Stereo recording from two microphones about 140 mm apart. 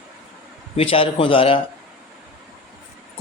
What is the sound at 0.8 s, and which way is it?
Speech, 40° left (ahead or behind).